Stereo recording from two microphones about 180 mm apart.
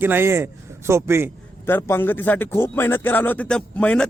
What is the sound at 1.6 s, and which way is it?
Speech, 10° left (ahead or behind).